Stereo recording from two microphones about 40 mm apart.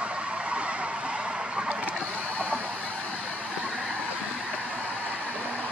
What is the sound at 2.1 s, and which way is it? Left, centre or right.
Mechanisms, right.